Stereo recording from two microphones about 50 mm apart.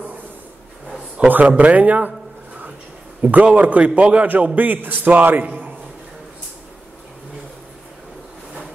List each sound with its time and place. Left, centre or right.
1.2 s speech: right
3.2 s a man's voice: right